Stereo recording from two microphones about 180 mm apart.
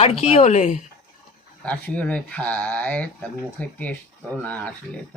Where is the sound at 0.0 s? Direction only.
35° left (ahead or behind).